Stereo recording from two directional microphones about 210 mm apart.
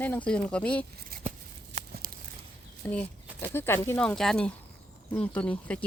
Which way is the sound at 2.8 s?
10° left (ahead or behind).